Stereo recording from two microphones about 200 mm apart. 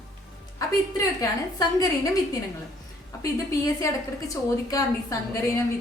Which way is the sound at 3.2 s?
15° left (ahead or behind).